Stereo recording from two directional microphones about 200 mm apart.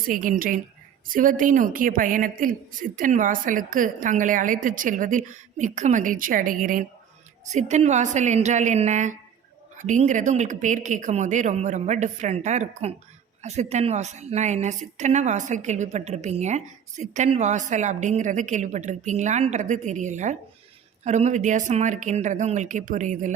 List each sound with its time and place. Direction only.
0.1 s a woman's voice: 45° right (ahead or behind)